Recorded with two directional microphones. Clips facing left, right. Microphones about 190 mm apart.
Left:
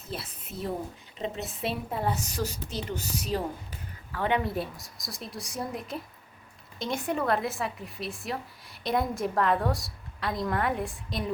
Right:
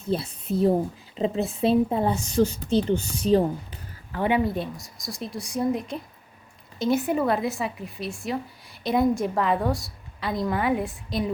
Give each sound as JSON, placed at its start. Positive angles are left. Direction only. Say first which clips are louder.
{"t": 0.0, "sound": "speech", "louder": "right 11 dB", "side_deg": -30}
{"t": 4.3, "sound": "a woman's voice", "louder": "right 5 dB", "side_deg": -10}